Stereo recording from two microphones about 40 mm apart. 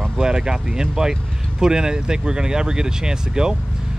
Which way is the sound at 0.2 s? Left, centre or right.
Centre.